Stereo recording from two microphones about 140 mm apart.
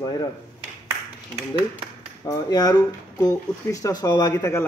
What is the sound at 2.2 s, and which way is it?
Speech, 25° left (ahead or behind).